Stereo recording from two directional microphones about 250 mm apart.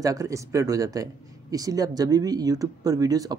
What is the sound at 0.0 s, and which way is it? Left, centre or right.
Speech, centre.